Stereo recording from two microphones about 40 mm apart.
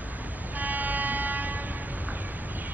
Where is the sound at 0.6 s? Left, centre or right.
Right.